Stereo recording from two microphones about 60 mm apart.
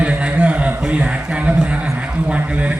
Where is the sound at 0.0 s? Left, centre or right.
Right.